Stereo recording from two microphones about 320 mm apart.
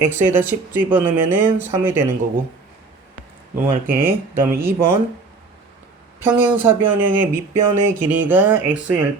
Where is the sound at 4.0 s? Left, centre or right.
Centre.